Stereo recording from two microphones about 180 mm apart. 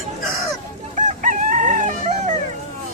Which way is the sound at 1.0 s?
45° right (ahead or behind).